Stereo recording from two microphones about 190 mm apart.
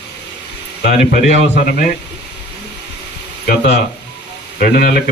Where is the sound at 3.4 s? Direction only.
60° left (ahead or behind).